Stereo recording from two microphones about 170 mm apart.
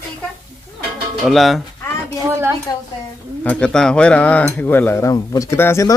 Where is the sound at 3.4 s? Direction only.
5° left (ahead or behind).